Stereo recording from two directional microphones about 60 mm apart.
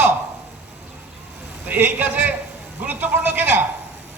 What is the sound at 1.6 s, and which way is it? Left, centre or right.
A man's voice, right.